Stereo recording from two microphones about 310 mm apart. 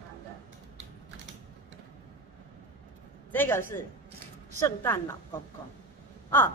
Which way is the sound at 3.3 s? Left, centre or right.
Centre.